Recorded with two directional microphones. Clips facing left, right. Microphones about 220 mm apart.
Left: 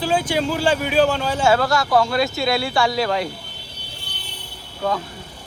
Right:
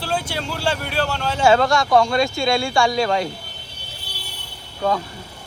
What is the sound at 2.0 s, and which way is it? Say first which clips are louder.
Speech: even; 5° left (ahead or behind).